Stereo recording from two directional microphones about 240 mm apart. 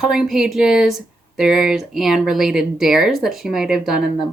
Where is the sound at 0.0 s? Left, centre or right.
Centre.